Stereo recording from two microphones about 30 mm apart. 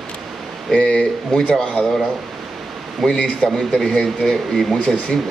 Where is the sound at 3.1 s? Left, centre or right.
Left; by 4.8 s centre.